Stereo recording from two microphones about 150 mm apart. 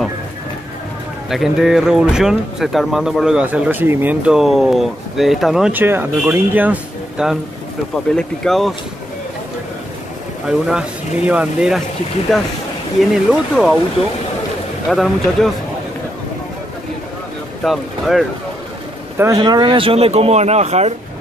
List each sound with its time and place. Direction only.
1.3 s speech: centre (ahead or behind)
10.7 s speech: 10° right (ahead or behind)
13.1 s speech: 5° right (ahead or behind)
14.9 s speech: centre (ahead or behind)
17.6 s speech: centre (ahead or behind)
19.1 s speech: 20° right (ahead or behind); by 20.9 s 45° right (ahead or behind)